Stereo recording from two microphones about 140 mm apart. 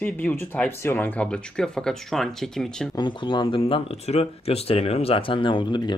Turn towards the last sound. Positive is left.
turn(degrees=35)  # may be behind; listen again after turning